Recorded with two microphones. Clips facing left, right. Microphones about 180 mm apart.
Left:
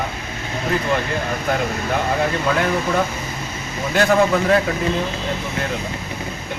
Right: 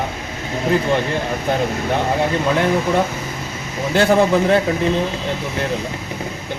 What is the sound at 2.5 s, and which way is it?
Speech, 25° right (ahead or behind).